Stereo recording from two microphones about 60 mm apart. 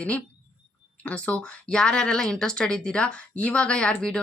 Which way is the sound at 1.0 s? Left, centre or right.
Centre.